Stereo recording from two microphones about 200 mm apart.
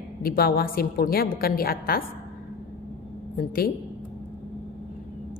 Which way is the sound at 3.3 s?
50° left (ahead or behind).